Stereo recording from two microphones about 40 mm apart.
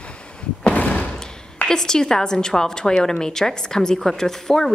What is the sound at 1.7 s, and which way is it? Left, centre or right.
A woman's voice, centre.